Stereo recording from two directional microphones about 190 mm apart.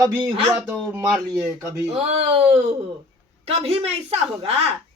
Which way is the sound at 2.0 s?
30° right (ahead or behind).